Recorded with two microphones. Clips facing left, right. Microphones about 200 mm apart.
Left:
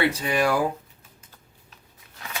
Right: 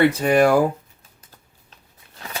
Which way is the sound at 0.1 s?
50° right (ahead or behind).